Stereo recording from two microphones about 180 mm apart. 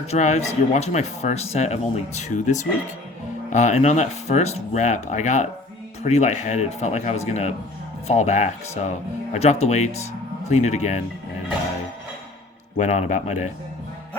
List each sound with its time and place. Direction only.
0.1 s speech: 40° left (ahead or behind)
12.7 s speech: 40° left (ahead or behind)